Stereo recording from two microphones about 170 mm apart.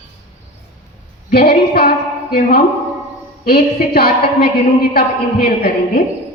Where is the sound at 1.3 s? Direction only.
60° left (ahead or behind).